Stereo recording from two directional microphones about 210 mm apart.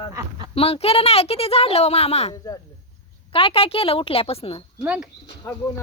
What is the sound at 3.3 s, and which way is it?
A woman's voice, 25° left (ahead or behind).